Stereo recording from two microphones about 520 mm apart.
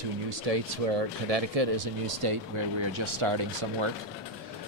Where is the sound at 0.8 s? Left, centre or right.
Right.